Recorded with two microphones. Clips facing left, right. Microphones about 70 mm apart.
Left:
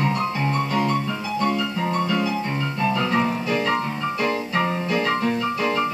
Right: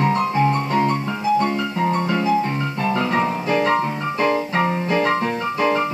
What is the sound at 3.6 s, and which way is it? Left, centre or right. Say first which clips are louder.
Piano: right 3 dB; right.